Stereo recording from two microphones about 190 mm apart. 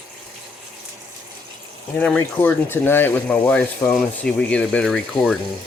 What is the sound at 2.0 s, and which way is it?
Speech, 10° left (ahead or behind).